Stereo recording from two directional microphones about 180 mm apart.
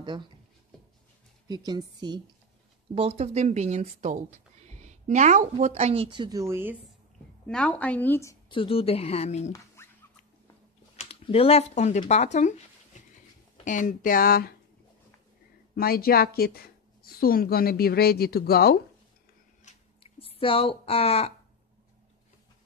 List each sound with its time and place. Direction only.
1.5 s a woman's voice: 20° right (ahead or behind)
7.4 s a woman's voice: 5° left (ahead or behind)
8.5 s speech: 30° left (ahead or behind)
9.8 s a sound: 15° left (ahead or behind)
11.0 s speech: 35° left (ahead or behind)
13.7 s speech: 45° left (ahead or behind)
15.7 s a woman's voice: 55° left (ahead or behind)
19.6 s a sound: 30° left (ahead or behind)